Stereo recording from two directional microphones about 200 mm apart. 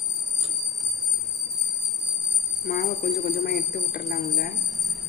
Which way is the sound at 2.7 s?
50° left (ahead or behind).